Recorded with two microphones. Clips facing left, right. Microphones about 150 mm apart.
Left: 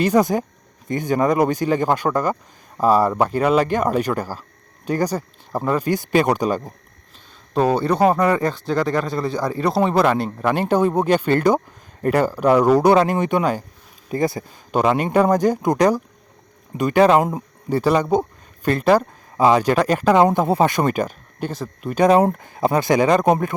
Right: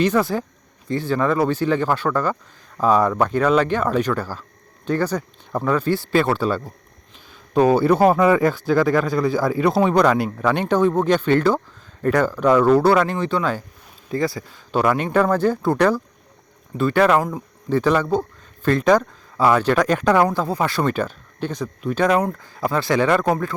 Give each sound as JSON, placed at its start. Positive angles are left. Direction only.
{"t": 0.0, "sound": "speech", "side_deg": 15}
{"t": 7.5, "sound": "a man's voice", "side_deg": -5}
{"t": 18.7, "sound": "speech", "side_deg": 5}
{"t": 20.1, "sound": "speech", "side_deg": 20}
{"t": 22.0, "sound": "speech", "side_deg": 30}